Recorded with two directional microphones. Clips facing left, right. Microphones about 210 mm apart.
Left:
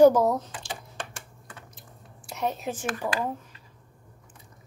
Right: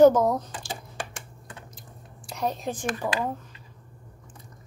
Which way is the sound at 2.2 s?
5° left (ahead or behind).